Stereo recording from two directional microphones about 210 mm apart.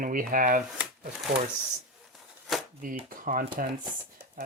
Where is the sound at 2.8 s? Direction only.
40° right (ahead or behind).